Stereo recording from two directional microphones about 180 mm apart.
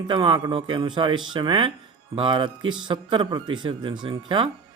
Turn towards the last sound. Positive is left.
turn(degrees=-25)  # may be behind; listen again after turning